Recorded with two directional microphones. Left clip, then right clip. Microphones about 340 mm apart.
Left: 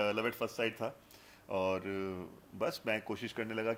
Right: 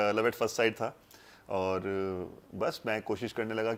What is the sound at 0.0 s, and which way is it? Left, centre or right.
Speech, centre.